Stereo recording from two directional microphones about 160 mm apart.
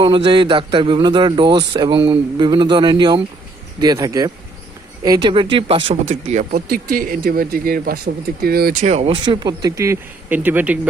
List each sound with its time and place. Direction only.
0.0 s a man's voice: 30° right (ahead or behind)
5.3 s speech: 35° right (ahead or behind)
6.5 s speech: 65° right (ahead or behind)
8.8 s a man's voice: 45° right (ahead or behind); by 10.8 s 10° right (ahead or behind)